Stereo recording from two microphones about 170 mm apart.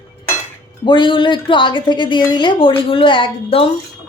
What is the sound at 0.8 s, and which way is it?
A woman's voice, 30° left (ahead or behind).